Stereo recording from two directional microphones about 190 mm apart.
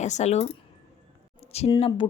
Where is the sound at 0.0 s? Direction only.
40° left (ahead or behind).